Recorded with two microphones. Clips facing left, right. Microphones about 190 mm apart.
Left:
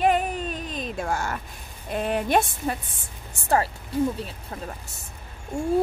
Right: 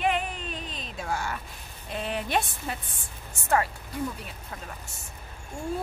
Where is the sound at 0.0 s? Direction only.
45° left (ahead or behind).